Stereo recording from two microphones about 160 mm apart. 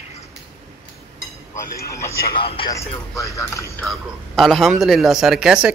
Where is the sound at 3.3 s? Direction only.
20° left (ahead or behind).